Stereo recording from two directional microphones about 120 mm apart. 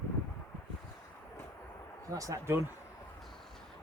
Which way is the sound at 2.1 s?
30° right (ahead or behind).